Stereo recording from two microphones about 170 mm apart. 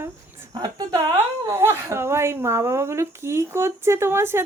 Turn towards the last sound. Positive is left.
turn(degrees=-15)  # may be behind; listen again after turning